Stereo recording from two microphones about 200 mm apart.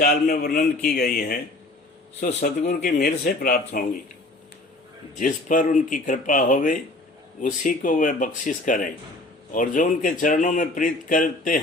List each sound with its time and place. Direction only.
0.0 s speech: 50° left (ahead or behind)
5.1 s a man's voice: 40° left (ahead or behind)